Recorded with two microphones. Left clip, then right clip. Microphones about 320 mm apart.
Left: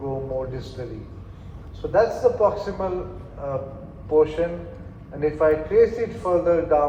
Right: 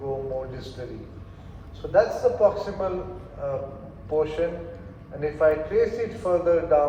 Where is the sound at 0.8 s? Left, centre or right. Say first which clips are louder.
Left 2 dB; left.